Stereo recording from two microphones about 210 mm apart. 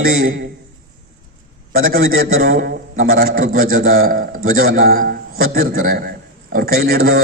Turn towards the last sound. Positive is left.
turn(degrees=-45)  # may be behind; listen again after turning